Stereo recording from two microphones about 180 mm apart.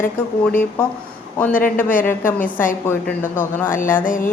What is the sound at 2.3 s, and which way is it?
A woman's voice, 10° left (ahead or behind).